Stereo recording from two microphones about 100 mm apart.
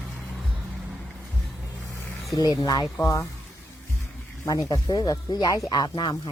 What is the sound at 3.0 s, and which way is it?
Speech, 30° left (ahead or behind).